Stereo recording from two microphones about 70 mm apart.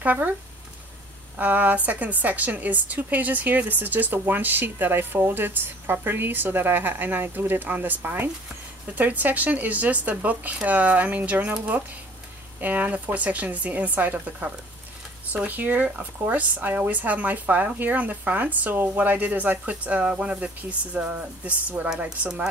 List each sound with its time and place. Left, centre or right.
0.0 s a woman's voice: right
1.3 s a woman's voice: right
12.5 s a woman's voice: right